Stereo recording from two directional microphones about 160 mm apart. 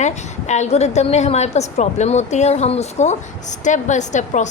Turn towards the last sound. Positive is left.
turn(degrees=50)  # may be behind; listen again after turning